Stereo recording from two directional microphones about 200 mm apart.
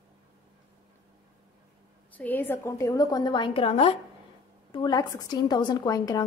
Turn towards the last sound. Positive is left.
turn(degrees=20)  # may be behind; listen again after turning